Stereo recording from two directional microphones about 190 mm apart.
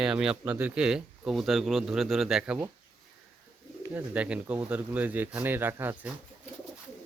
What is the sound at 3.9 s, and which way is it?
Speech, 5° right (ahead or behind).